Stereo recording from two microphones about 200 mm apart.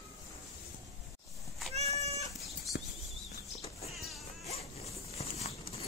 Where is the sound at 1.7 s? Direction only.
30° right (ahead or behind).